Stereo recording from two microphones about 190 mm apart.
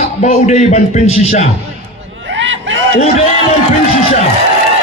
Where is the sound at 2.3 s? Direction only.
75° right (ahead or behind).